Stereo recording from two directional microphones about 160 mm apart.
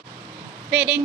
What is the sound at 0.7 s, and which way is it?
Speech, 10° right (ahead or behind).